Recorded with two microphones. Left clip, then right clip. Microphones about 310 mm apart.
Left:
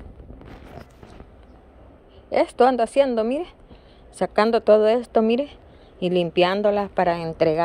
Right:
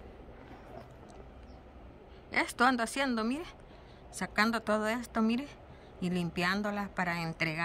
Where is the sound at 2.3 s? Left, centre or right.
Centre.